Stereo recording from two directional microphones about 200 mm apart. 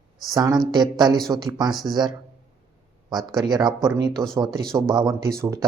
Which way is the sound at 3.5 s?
20° right (ahead or behind).